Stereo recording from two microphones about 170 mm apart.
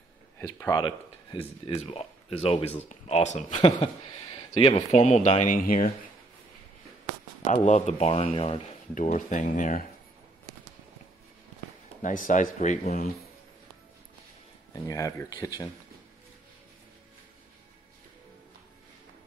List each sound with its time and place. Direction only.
0.6 s speech: 20° left (ahead or behind); by 3.5 s 40° left (ahead or behind)
3.6 s speech: 30° left (ahead or behind); by 5.9 s 55° left (ahead or behind)
7.4 s speech: 45° left (ahead or behind)
8.9 s speech: 50° left (ahead or behind)
12.0 s speech: 50° left (ahead or behind)
14.7 s speech: 20° left (ahead or behind)